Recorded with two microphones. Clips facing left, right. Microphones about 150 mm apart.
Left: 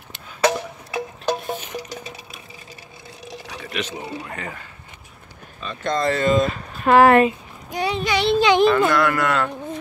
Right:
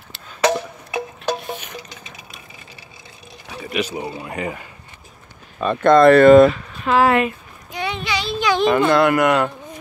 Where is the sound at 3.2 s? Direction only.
90° left.